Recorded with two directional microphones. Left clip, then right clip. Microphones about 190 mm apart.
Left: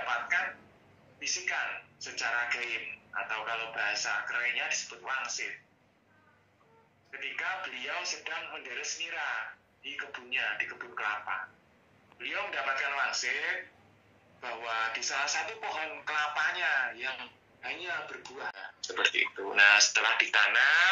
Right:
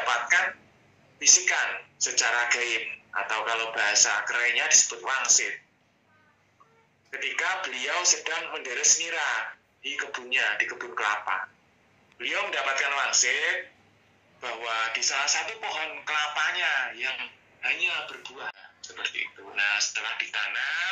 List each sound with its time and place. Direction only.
0.0 s telephone: 35° right (ahead or behind)
1.2 s a man's voice: 35° right (ahead or behind)
7.1 s a man's voice: 35° right (ahead or behind); by 18.2 s centre (ahead or behind)
18.6 s speech: 40° left (ahead or behind)